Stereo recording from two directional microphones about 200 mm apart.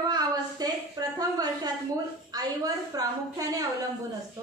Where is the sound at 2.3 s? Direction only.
20° right (ahead or behind).